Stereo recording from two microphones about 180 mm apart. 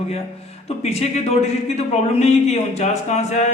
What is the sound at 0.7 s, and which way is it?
Speech, 35° left (ahead or behind).